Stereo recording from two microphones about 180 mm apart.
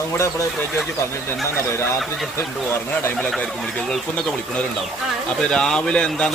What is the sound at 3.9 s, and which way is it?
Speech, 5° left (ahead or behind).